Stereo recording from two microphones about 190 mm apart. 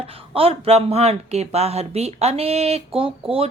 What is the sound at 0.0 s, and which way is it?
Speech, 30° right (ahead or behind).